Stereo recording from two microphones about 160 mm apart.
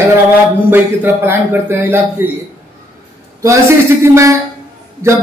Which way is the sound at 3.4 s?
20° right (ahead or behind).